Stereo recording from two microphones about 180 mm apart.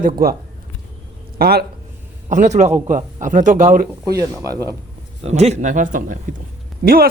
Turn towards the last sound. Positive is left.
turn(degrees=-55)  # may be behind; listen again after turning